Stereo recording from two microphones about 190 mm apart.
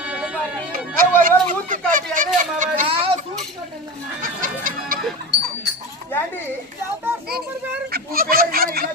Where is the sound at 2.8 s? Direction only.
30° right (ahead or behind).